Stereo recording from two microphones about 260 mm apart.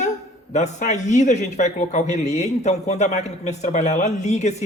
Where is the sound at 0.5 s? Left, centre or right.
Left.